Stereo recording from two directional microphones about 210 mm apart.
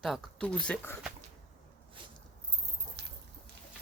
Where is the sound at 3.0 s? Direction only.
50° right (ahead or behind).